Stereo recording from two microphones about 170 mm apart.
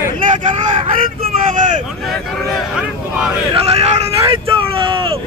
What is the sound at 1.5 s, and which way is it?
Speech, 45° right (ahead or behind).